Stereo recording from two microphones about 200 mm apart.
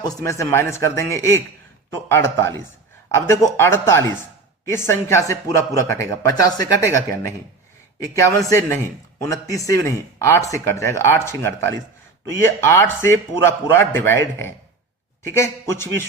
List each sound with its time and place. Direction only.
0.0 s speech: 15° left (ahead or behind)